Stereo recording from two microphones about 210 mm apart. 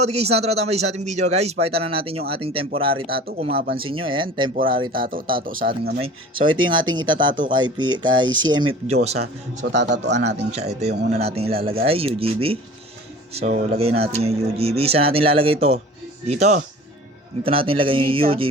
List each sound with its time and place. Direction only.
0.0 s a man's voice: 30° right (ahead or behind)
3.1 s speech: 45° right (ahead or behind)
3.8 s speech: 25° right (ahead or behind)
5.0 s speech: 40° right (ahead or behind)
6.4 s speech: 20° right (ahead or behind)
9.7 s a man's voice: 55° right (ahead or behind)
11.2 s a man's voice: 30° right (ahead or behind)